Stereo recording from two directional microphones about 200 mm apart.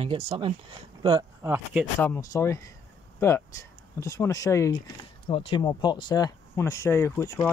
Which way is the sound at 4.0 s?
15° left (ahead or behind).